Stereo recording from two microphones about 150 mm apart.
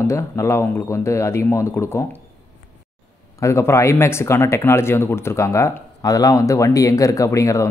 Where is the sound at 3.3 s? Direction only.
20° left (ahead or behind).